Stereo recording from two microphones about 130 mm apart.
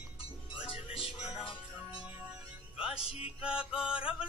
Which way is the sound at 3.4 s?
5° right (ahead or behind).